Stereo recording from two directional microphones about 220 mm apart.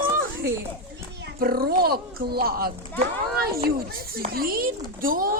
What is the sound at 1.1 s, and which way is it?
A child's voice, 45° right (ahead or behind).